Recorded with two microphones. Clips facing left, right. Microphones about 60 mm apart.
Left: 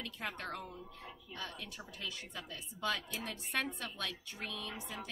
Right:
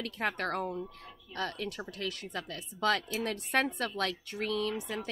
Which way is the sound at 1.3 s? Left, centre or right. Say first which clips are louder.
Right 11 dB; right.